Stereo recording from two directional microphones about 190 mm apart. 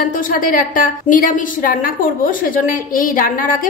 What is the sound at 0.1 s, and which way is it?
A woman's voice, 45° left (ahead or behind).